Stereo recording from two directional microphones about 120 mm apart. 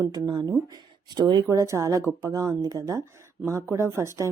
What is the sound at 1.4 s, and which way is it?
Speech, 25° right (ahead or behind).